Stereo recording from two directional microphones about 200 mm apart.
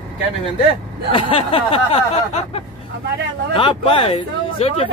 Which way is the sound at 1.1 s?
30° left (ahead or behind).